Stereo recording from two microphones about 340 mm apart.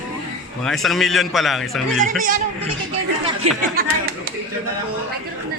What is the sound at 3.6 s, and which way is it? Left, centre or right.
Speech, right.